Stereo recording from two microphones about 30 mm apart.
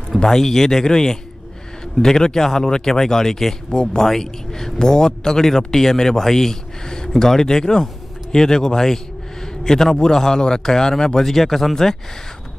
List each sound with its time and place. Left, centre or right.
0.3 s speech: centre
3.7 s speech: left
4.0 s speech: centre
11.2 s speech: centre